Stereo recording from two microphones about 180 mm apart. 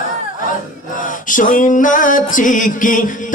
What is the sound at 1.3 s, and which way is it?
Music, 50° left (ahead or behind).